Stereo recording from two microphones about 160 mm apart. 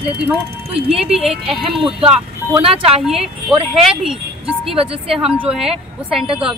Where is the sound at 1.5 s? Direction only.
35° right (ahead or behind).